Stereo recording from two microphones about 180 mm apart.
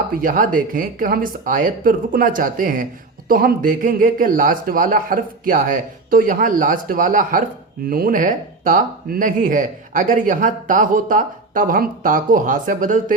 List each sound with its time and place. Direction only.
0.1 s speech: 50° right (ahead or behind)